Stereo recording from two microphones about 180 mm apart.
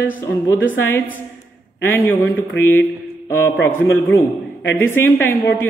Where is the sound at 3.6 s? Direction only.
10° left (ahead or behind).